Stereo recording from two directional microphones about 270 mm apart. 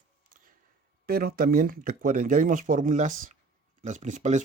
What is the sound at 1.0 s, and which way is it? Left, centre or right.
Speech, right.